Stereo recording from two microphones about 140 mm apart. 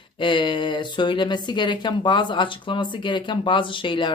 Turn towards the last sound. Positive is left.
turn(degrees=35)  # may be behind; listen again after turning